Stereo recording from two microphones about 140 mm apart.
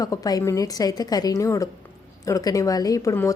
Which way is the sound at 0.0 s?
25° left (ahead or behind).